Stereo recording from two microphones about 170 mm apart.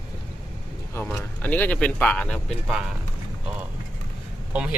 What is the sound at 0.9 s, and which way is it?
Speech, 10° left (ahead or behind).